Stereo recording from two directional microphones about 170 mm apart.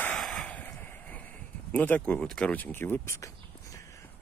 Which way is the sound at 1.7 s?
10° left (ahead or behind).